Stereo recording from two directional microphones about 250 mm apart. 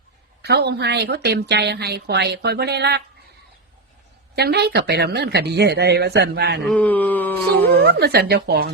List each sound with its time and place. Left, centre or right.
0.4 s a woman's voice: right
4.4 s a woman's voice: right
6.7 s speech: centre
7.7 s a woman's voice: right